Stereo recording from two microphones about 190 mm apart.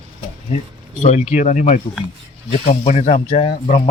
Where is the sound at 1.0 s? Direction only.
35° left (ahead or behind).